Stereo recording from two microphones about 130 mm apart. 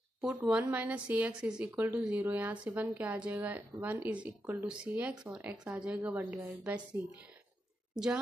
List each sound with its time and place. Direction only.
0.2 s speech: 5° right (ahead or behind)
1.7 s speech: 20° right (ahead or behind)
2.0 s a woman's voice: 10° right (ahead or behind)